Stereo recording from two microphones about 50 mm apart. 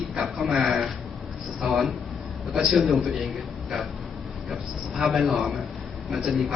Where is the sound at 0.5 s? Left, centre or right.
Centre.